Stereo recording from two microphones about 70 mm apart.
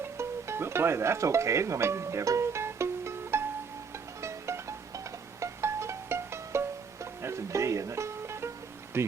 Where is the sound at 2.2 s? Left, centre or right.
Right.